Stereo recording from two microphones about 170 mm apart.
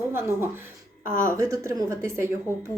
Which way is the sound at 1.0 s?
55° left (ahead or behind).